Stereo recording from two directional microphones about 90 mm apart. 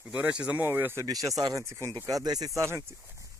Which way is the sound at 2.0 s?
45° right (ahead or behind).